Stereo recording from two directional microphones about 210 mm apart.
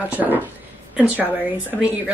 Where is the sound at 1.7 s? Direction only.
5° right (ahead or behind).